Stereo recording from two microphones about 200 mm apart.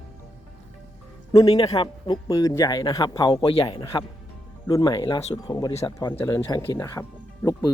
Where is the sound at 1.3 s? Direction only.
20° left (ahead or behind).